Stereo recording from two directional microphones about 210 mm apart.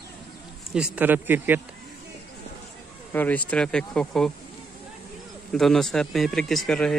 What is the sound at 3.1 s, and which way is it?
Speech, 10° left (ahead or behind).